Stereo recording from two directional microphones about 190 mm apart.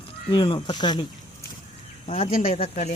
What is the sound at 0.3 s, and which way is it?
Speech, 25° left (ahead or behind).